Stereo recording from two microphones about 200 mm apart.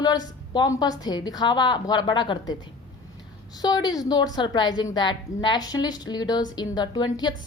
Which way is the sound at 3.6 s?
20° left (ahead or behind).